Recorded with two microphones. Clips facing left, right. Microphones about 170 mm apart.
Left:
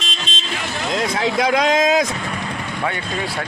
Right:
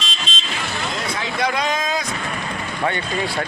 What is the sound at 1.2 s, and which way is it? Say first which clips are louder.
Speech: left 5 dB; 90° left.